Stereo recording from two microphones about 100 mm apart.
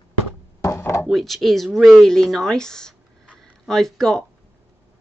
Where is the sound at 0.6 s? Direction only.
25° left (ahead or behind).